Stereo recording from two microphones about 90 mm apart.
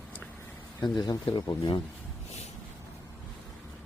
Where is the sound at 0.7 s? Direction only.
50° left (ahead or behind).